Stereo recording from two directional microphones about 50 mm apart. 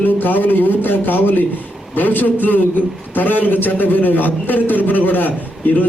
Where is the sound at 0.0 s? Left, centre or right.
Left.